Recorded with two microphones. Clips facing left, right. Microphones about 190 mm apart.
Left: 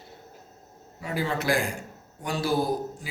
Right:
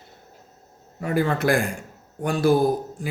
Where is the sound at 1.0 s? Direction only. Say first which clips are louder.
Right 7 dB; 55° right (ahead or behind).